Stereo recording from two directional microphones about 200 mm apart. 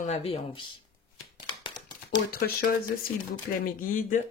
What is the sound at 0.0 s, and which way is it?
Speech, 30° left (ahead or behind).